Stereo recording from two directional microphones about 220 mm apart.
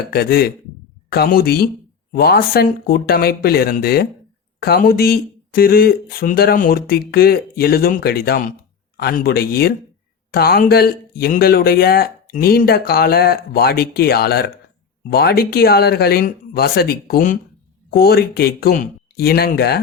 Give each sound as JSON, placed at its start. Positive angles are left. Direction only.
{"t": 0.1, "sound": "speech", "side_deg": 45}